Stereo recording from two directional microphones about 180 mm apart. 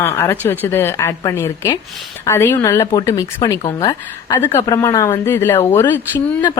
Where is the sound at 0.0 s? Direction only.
15° left (ahead or behind).